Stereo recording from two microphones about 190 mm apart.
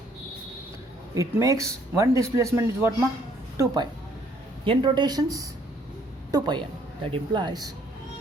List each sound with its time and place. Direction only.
1.1 s speech: 15° right (ahead or behind)
4.6 s a woman's voice: 25° right (ahead or behind)